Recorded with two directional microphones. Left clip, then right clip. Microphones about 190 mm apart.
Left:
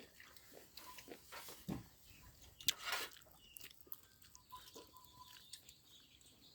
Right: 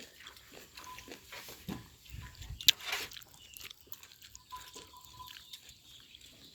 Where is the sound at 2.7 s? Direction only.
15° left (ahead or behind).